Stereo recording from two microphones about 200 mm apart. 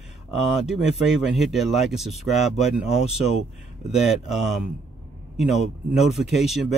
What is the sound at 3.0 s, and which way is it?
Speech, 30° left (ahead or behind).